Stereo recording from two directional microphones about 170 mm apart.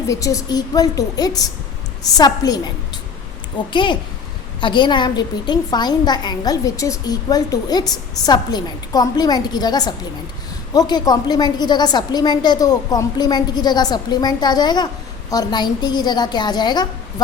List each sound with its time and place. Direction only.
0.1 s a woman's voice: 20° left (ahead or behind)
3.7 s a woman's voice: 30° left (ahead or behind)